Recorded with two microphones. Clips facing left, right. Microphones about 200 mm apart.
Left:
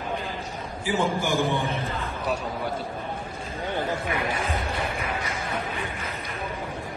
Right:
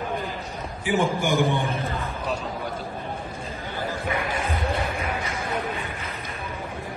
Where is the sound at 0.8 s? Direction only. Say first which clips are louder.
Right 2 dB; 15° right (ahead or behind).